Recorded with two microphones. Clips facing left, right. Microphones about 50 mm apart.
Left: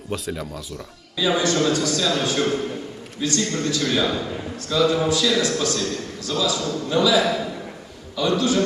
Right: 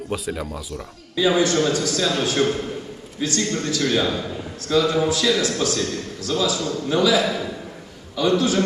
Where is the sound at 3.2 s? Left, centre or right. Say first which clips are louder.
Even; centre.